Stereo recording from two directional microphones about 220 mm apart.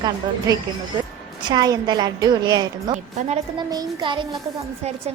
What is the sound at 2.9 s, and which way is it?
Speech, 30° right (ahead or behind).